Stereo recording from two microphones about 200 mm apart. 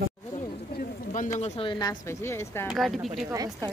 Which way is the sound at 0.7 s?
40° left (ahead or behind).